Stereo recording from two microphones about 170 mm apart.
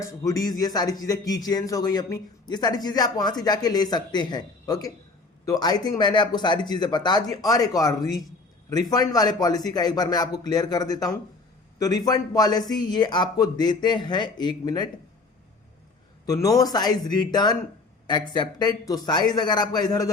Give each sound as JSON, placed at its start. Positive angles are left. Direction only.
{"t": 0.0, "sound": "a man's voice", "side_deg": 20}
{"t": 16.2, "sound": "a man's voice", "side_deg": 20}